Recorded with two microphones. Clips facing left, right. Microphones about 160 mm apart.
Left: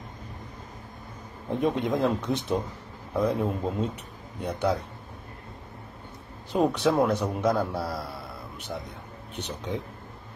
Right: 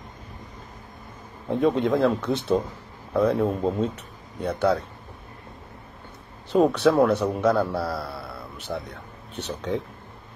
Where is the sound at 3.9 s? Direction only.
15° left (ahead or behind).